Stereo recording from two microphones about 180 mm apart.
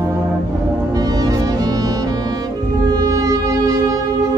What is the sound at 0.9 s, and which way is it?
Music, 20° right (ahead or behind).